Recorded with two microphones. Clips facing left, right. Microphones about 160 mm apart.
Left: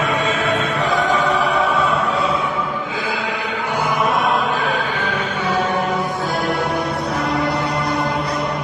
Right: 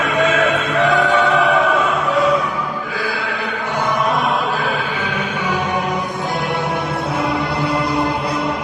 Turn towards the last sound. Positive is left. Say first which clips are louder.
# even
turn(degrees=-30)  # may be behind; listen again after turning